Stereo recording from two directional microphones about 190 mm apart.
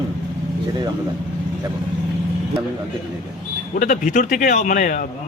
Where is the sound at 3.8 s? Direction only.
40° left (ahead or behind).